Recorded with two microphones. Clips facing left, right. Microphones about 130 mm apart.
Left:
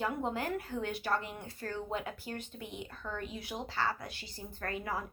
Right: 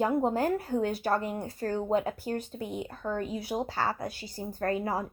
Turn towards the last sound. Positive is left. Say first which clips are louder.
# right 8 dB
turn(degrees=-35)  # may be behind; listen again after turning